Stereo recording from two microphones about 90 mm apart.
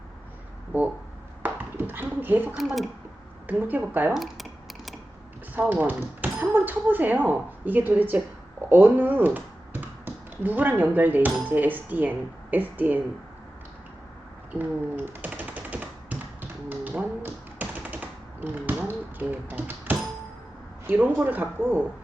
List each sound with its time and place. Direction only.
0.7 s speech: 20° right (ahead or behind)
1.4 s a sound: 25° right (ahead or behind)
2.6 s speech: centre (ahead or behind)
3.4 s speech: 20° right (ahead or behind)
4.1 s typing: centre (ahead or behind)
5.5 s speech: 20° right (ahead or behind)
14.5 s typewriter: 20° right (ahead or behind)
20.8 s speech: 15° right (ahead or behind)